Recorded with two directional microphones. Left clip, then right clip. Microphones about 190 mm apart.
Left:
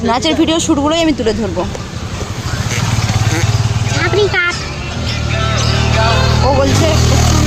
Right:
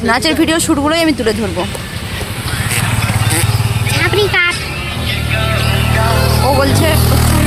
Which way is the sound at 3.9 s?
10° left (ahead or behind).